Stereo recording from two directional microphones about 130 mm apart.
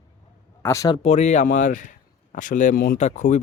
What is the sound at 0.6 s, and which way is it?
Speech, 25° left (ahead or behind).